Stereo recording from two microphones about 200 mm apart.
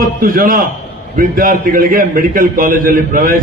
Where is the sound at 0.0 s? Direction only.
45° right (ahead or behind).